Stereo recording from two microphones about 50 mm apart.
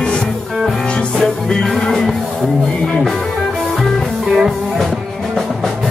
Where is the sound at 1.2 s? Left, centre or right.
Centre.